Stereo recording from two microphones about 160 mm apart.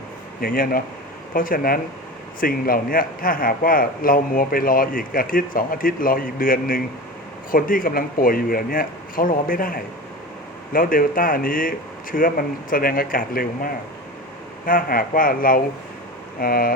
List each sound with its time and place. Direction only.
0.4 s a man's voice: 65° left (ahead or behind)
14.7 s a man's voice: 60° left (ahead or behind)